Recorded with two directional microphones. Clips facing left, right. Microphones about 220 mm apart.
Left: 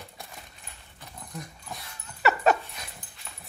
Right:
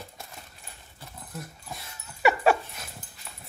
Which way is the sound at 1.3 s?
Centre (ahead or behind).